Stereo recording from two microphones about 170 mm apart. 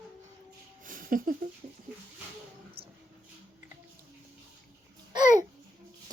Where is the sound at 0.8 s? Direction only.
55° right (ahead or behind).